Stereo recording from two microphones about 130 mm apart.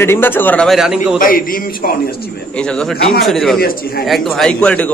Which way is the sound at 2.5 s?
5° left (ahead or behind).